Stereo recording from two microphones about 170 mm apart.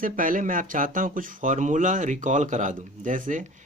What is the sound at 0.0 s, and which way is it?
Speech, 55° right (ahead or behind).